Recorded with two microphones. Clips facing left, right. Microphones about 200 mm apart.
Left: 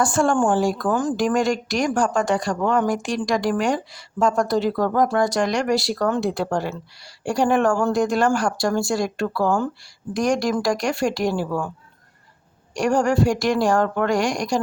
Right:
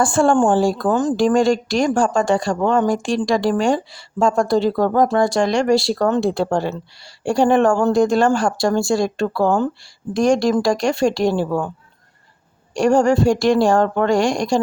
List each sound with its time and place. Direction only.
0.0 s speech: 30° right (ahead or behind)
12.7 s speech: 25° right (ahead or behind)